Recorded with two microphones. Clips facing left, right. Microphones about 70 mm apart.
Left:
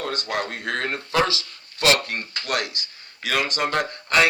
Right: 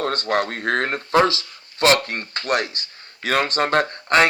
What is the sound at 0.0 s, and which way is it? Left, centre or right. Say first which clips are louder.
A man's voice: right 5 dB; right.